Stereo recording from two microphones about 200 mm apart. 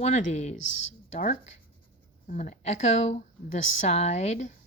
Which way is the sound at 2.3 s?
35° left (ahead or behind).